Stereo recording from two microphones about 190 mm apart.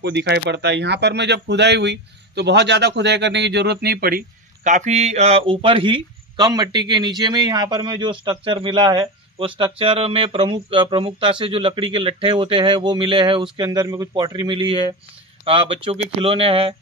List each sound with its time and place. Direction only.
0.0 s speech: 65° right (ahead or behind)
4.6 s speech: 40° right (ahead or behind)